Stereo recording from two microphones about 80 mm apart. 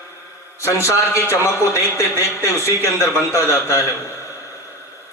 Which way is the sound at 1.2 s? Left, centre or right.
Left.